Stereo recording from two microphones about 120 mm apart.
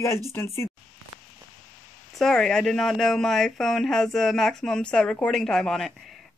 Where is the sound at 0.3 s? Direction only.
20° left (ahead or behind).